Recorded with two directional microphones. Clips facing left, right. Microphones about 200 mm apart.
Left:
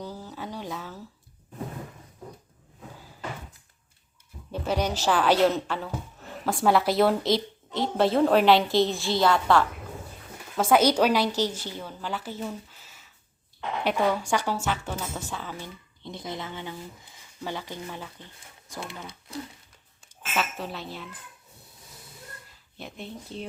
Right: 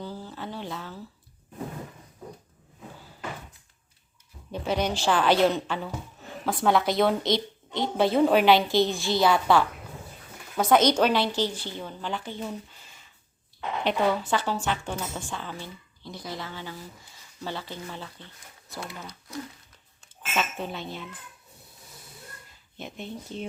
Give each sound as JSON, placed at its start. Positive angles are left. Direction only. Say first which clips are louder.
{"t": 0.0, "sound": "a sound", "louder": "even", "side_deg": 10}
{"t": 4.5, "sound": "a sound", "louder": "even", "side_deg": 5}
{"t": 5.0, "sound": "a woman's voice", "louder": "even", "side_deg": 5}
{"t": 16.0, "sound": "speech", "louder": "left 1 dB", "side_deg": 20}
{"t": 20.4, "sound": "a woman's voice", "louder": "right 1 dB", "side_deg": 0}
{"t": 22.8, "sound": "a woman's voice", "louder": "right 2 dB", "side_deg": 0}